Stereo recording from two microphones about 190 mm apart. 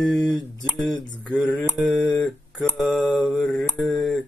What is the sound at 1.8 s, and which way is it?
Mantra, 5° right (ahead or behind).